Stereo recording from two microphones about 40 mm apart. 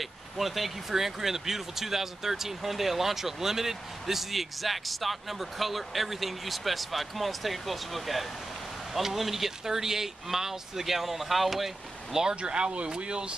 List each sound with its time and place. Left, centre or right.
0.0 s speech: centre
12.4 s speech: right